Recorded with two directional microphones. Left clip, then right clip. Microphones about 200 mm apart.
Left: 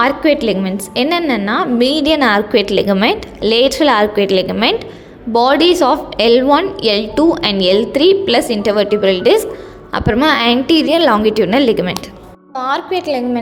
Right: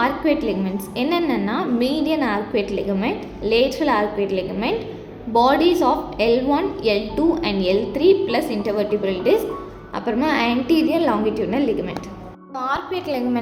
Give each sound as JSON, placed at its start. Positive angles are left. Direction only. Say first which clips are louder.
{"t": 0.4, "sound": "a woman's voice", "louder": "left 7 dB", "side_deg": 40}
{"t": 12.5, "sound": "a woman's voice", "louder": "left 7 dB", "side_deg": 30}